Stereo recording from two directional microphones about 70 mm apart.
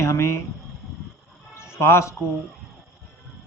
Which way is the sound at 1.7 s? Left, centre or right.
Left.